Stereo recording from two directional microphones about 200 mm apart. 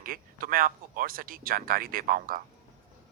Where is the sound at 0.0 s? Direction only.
45° right (ahead or behind).